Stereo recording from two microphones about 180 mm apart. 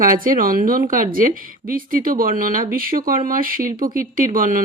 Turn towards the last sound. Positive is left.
turn(degrees=-50)  # may be behind; listen again after turning